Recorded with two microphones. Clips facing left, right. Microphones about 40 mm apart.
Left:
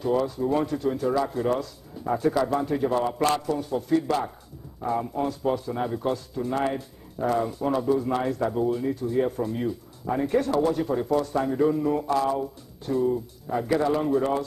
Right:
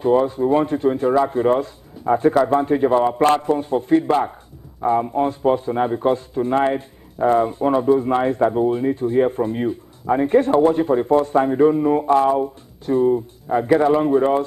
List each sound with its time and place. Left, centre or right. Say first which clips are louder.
0.0 s a man's voice: right 8 dB; right